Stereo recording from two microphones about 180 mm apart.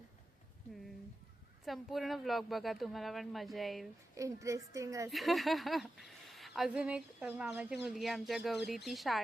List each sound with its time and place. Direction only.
1.6 s speech: centre (ahead or behind)
4.2 s a woman's voice: 15° right (ahead or behind)
5.0 s speech: centre (ahead or behind)